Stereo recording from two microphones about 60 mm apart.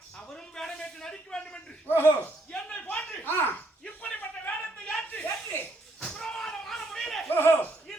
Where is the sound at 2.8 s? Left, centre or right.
Centre.